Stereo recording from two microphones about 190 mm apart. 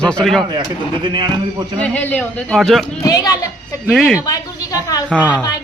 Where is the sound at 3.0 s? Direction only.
20° left (ahead or behind).